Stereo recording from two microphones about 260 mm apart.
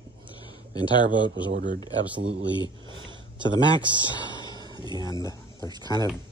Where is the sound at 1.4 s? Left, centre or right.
Right.